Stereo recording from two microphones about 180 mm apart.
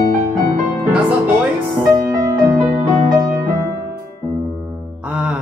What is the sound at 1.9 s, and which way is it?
Music, 20° right (ahead or behind).